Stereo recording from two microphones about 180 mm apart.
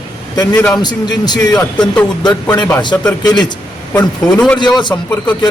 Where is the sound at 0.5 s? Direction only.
5° left (ahead or behind).